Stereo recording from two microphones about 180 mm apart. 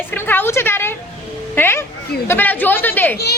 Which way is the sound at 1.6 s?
10° left (ahead or behind).